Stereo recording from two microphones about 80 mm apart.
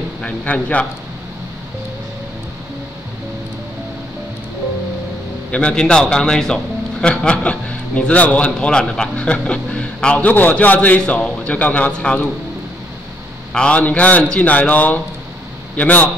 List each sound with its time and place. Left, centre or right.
0.2 s a man's voice: centre
5.5 s a man's voice: centre
13.5 s a man's voice: centre